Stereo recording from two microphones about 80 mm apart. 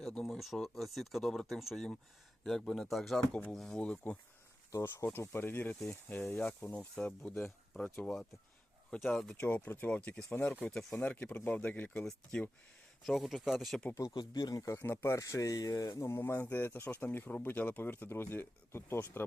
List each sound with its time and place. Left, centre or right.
0.0 s speech: centre
3.2 s speech: centre
4.8 s speech: left
6.7 s speech: centre
9.3 s speech: centre
10.7 s speech: centre
10.9 s speech: centre
12.0 s speech: centre
14.3 s speech: left
14.8 s speech: left
15.1 s speech: left
16.1 s speech: left